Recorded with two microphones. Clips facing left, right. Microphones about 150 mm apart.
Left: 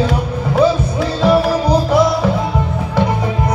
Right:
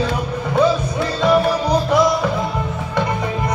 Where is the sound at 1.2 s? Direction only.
5° left (ahead or behind).